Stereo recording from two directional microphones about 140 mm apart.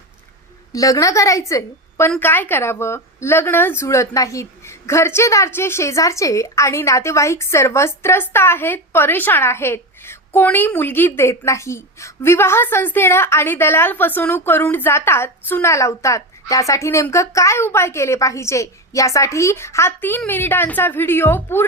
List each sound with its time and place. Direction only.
0.7 s a woman's voice: 25° left (ahead or behind)